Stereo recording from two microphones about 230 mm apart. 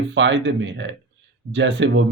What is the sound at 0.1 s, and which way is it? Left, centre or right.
Speech, right.